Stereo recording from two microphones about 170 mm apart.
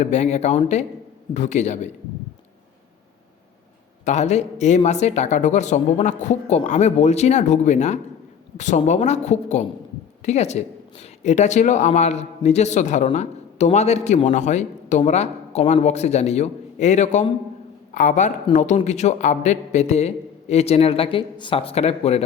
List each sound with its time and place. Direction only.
0.0 s a man's voice: 40° left (ahead or behind)
4.0 s a man's voice: 40° left (ahead or behind)